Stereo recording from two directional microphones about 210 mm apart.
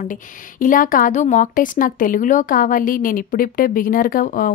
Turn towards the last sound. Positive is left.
turn(degrees=40)  # may be behind; listen again after turning